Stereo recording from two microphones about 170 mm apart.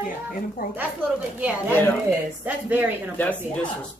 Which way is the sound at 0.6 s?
60° left (ahead or behind).